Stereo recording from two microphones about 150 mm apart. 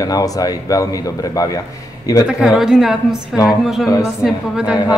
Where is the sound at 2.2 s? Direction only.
5° right (ahead or behind).